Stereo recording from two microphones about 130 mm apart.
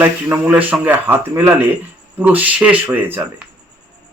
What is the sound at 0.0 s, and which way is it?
Speech, 15° right (ahead or behind).